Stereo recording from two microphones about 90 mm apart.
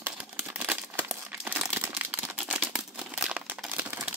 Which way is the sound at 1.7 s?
25° right (ahead or behind).